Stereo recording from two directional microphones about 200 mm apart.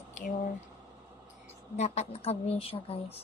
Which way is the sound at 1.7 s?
35° left (ahead or behind).